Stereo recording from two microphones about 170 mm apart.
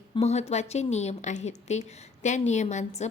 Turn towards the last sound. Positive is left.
turn(degrees=40)  # may be behind; listen again after turning